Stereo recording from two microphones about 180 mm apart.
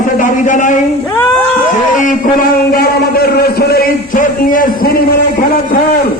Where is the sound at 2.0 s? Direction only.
55° left (ahead or behind).